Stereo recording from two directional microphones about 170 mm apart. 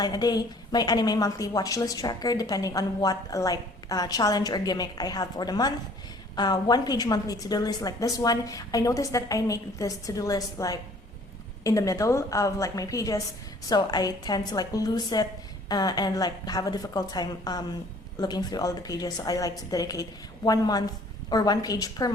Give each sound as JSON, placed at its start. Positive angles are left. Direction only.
{"t": 0.0, "sound": "a woman's voice", "side_deg": 25}